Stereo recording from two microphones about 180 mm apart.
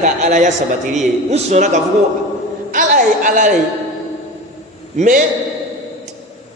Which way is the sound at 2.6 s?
50° right (ahead or behind).